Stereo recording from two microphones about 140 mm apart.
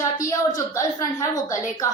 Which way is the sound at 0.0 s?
25° left (ahead or behind).